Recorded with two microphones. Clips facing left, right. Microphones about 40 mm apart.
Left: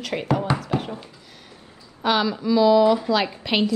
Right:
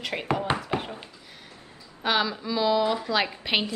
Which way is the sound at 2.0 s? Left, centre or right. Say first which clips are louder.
Left 4 dB; centre.